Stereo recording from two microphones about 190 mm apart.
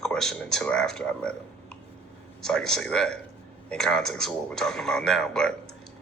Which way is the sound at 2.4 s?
5° left (ahead or behind).